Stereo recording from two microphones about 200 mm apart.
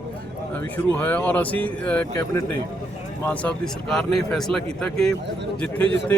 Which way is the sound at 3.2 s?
5° left (ahead or behind).